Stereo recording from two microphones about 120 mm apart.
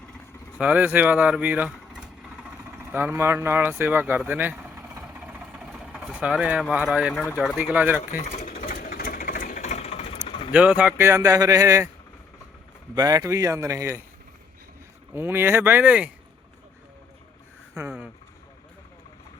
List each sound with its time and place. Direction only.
0.6 s speech: 10° right (ahead or behind)
2.0 s vehicle: 5° right (ahead or behind)
2.7 s speech: 15° right (ahead or behind)
4.3 s vehicle: 15° right (ahead or behind)
7.6 s speech: 15° right (ahead or behind)
8.1 s speech: 90° left
8.6 s sewing machine: 90° left; by 10.3 s 60° left (ahead or behind)
10.5 s speech: 10° right (ahead or behind); by 11.9 s 25° right (ahead or behind)
13.0 s speech: 30° right (ahead or behind)
15.1 s speech: 20° right (ahead or behind)
17.7 s a sound: 15° right (ahead or behind)